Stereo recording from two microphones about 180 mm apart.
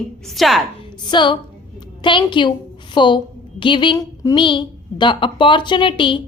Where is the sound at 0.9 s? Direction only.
25° left (ahead or behind).